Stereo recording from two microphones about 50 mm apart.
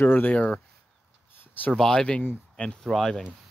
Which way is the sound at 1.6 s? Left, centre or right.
Left.